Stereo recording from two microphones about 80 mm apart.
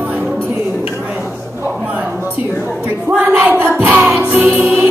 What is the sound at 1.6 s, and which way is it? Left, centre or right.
Speech, right.